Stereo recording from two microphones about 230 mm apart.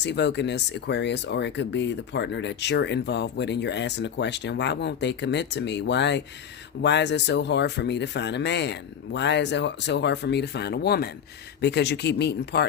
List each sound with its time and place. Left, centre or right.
0.0 s speech: left